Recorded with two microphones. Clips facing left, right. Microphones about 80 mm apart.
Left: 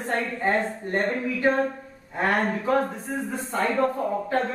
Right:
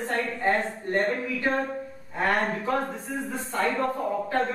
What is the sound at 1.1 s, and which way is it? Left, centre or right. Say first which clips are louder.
A woman's voice: left 3 dB; centre.